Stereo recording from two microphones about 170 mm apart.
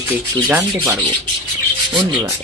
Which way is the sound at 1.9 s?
30° right (ahead or behind).